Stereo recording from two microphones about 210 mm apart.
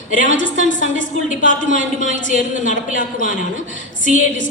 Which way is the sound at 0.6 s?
40° left (ahead or behind).